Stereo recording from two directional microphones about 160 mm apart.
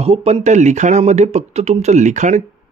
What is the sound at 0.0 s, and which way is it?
A man's voice, 40° right (ahead or behind).